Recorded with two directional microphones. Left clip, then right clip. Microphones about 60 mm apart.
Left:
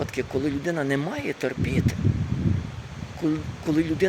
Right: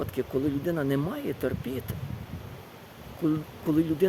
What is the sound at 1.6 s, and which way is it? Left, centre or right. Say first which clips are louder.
Speech: left 7 dB; right.